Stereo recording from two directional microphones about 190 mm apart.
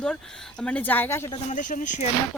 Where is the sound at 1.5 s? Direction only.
45° left (ahead or behind).